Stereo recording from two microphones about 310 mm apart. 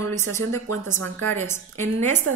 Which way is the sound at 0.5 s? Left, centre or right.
Right.